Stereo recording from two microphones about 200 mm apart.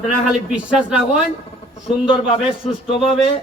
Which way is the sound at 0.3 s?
5° right (ahead or behind).